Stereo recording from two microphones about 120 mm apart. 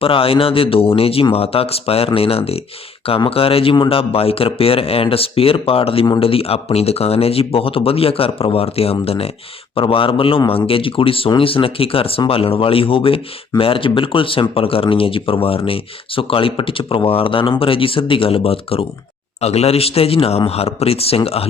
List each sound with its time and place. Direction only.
0.0 s a man's voice: 50° left (ahead or behind)